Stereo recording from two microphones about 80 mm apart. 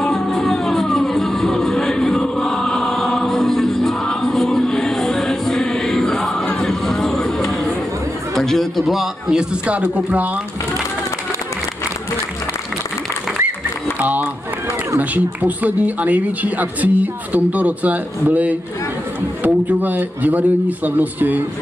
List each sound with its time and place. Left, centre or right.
0.0 s music: centre
6.7 s a sound: centre
8.4 s a man's voice: centre
13.9 s speech: right